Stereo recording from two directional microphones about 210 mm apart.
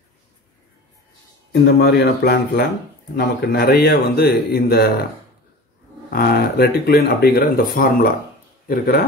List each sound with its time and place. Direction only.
1.5 s speech: 50° left (ahead or behind)
6.0 s speech: 45° left (ahead or behind)